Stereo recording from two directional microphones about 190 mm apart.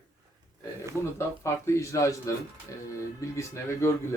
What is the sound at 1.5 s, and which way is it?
Speech, 15° left (ahead or behind).